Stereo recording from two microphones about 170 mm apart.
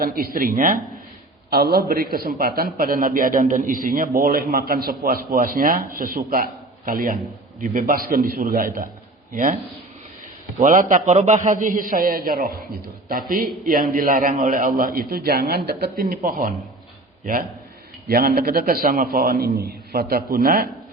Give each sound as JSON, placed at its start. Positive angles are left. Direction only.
{"t": 0.0, "sound": "a man's voice", "side_deg": -60}
{"t": 10.6, "sound": "a man's voice", "side_deg": -50}
{"t": 18.1, "sound": "a man's voice", "side_deg": -60}